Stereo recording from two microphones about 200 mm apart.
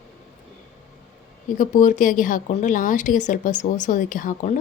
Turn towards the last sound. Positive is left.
turn(degrees=40)  # may be behind; listen again after turning